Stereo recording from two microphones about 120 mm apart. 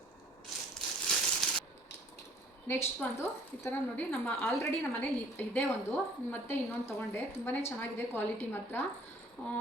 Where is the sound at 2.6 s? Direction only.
15° left (ahead or behind).